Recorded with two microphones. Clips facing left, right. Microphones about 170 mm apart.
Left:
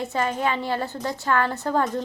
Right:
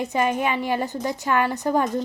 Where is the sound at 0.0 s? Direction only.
15° right (ahead or behind).